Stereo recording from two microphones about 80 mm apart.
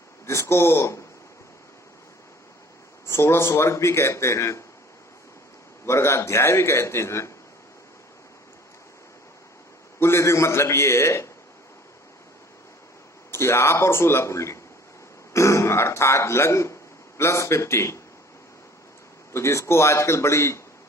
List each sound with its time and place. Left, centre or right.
0.3 s a man's voice: left
3.1 s a man's voice: left
5.8 s a man's voice: left
10.0 s a man's voice: left
13.3 s a man's voice: left
19.3 s a man's voice: left